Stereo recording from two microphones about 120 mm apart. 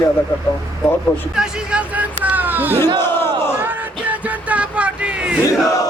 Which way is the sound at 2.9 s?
20° left (ahead or behind).